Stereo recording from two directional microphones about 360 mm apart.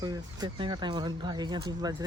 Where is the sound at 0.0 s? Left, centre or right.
Centre.